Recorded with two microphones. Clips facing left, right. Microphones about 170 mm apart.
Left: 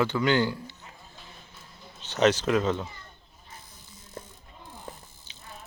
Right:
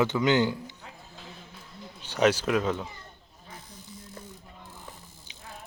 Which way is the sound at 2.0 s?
10° right (ahead or behind).